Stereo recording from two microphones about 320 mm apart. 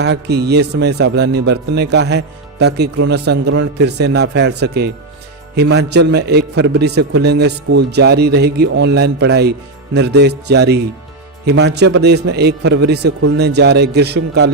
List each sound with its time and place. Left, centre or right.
0.0 s a man's voice: right